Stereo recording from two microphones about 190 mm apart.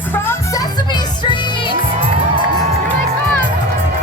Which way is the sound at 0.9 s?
25° left (ahead or behind).